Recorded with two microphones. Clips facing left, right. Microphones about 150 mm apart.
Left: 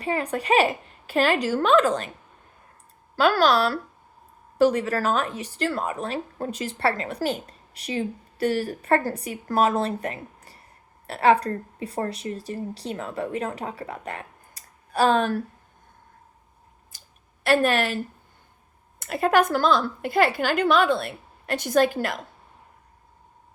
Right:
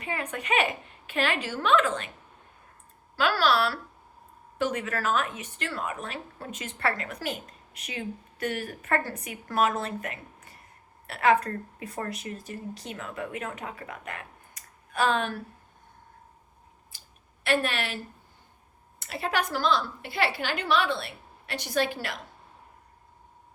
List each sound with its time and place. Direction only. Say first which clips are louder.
0.0 s a woman's voice: left 7 dB; 35° left (ahead or behind)
3.2 s a woman's voice: left 5 dB; 40° left (ahead or behind)
16.9 s clicking: left 1 dB; 45° left (ahead or behind)
17.4 s a woman's voice: left 7 dB; 40° left (ahead or behind)